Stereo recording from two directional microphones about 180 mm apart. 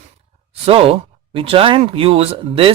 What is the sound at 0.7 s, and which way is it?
Speech, 30° right (ahead or behind).